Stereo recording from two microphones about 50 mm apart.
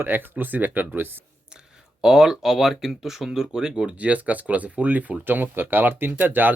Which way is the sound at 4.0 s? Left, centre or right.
Right.